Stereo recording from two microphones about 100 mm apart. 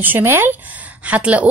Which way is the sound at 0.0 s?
20° right (ahead or behind).